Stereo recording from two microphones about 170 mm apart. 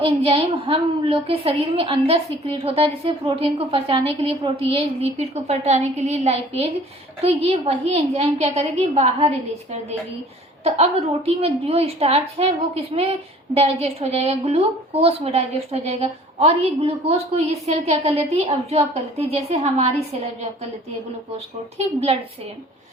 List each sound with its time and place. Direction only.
0.0 s a woman's voice: 35° right (ahead or behind)
11.3 s a woman's voice: 35° right (ahead or behind)
21.8 s a woman's voice: 40° right (ahead or behind)